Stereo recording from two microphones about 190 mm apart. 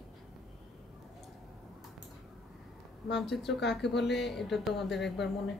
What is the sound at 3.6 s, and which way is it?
Speech, 65° left (ahead or behind).